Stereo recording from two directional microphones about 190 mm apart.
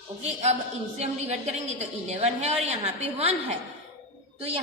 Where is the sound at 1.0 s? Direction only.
35° right (ahead or behind).